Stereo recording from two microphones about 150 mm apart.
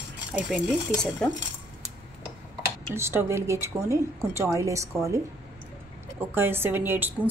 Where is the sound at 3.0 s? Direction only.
15° right (ahead or behind).